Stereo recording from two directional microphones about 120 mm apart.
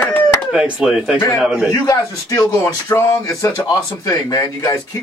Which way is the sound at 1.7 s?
30° left (ahead or behind).